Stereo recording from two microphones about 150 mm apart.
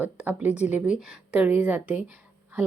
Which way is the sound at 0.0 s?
10° right (ahead or behind).